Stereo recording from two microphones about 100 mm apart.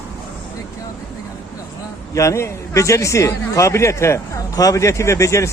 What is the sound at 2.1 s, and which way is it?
A man's voice, 30° left (ahead or behind).